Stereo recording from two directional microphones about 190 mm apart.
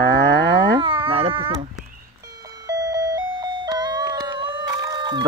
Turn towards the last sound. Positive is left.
turn(degrees=-20)  # may be behind; listen again after turning